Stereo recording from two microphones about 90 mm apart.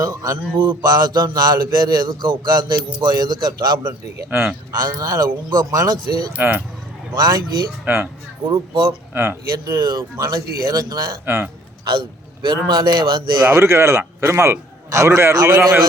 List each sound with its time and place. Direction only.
0.0 s a man's voice: 40° right (ahead or behind)
0.6 s speech: 55° right (ahead or behind)
3.8 s speech: 25° right (ahead or behind)
4.7 s speech: 45° right (ahead or behind)
6.3 s speech: 20° right (ahead or behind)
7.1 s speech: 45° right (ahead or behind)
7.9 s speech: 20° right (ahead or behind)
8.5 s speech: 70° right (ahead or behind)
9.1 s speech: 25° right (ahead or behind)
10.0 s speech: 40° right (ahead or behind)
11.3 s speech: 25° right (ahead or behind)
11.9 s a man's voice: 65° right (ahead or behind)
13.4 s a man's voice: 30° right (ahead or behind)